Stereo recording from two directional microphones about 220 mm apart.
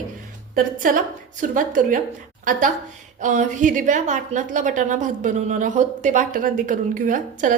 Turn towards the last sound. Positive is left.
turn(degrees=-35)  # may be behind; listen again after turning